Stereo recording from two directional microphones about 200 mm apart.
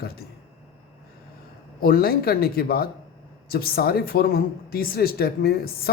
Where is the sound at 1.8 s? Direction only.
50° left (ahead or behind).